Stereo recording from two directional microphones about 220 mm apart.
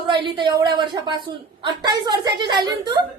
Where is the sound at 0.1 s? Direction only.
20° right (ahead or behind).